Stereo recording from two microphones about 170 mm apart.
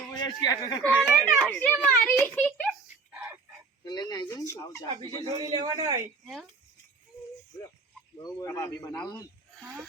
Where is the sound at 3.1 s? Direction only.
10° right (ahead or behind).